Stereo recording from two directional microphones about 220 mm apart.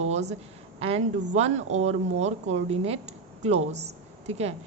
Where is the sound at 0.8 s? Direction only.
30° right (ahead or behind).